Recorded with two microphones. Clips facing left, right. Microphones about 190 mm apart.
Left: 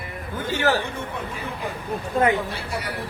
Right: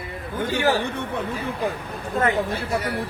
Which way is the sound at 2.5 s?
45° right (ahead or behind).